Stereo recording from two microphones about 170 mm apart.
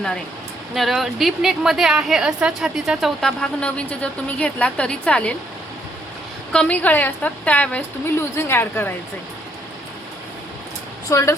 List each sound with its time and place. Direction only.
0.7 s a woman's voice: centre (ahead or behind)
6.5 s a woman's voice: 5° left (ahead or behind)
11.1 s a woman's voice: 20° left (ahead or behind)